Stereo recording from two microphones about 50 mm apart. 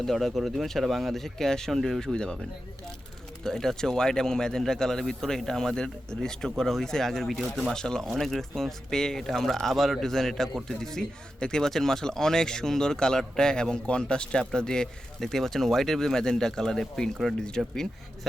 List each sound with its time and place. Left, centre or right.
0.0 s speech: centre
2.0 s speech: centre
3.4 s speech: centre
7.7 s speech: centre
17.6 s speech: centre